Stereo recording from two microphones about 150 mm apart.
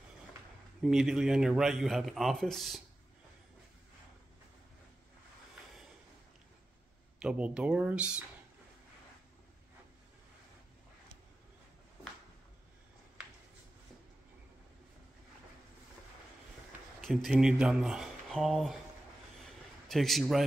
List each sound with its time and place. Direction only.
0.8 s a man's voice: 5° right (ahead or behind)
7.2 s speech: 5° right (ahead or behind)
17.0 s a man's voice: centre (ahead or behind)
19.9 s a man's voice: centre (ahead or behind)